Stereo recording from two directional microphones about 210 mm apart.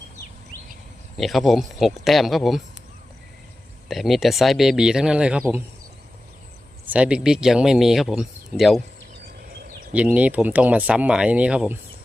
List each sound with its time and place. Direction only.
1.1 s speech: centre (ahead or behind)
3.8 s speech: centre (ahead or behind)
6.8 s speech: 5° right (ahead or behind)
9.9 s speech: 5° right (ahead or behind)